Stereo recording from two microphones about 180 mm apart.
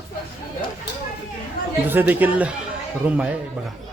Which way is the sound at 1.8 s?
10° right (ahead or behind).